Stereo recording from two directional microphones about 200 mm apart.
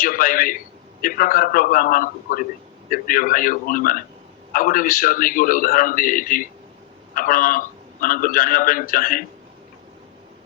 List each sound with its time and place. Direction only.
0.0 s a man's voice: 45° left (ahead or behind)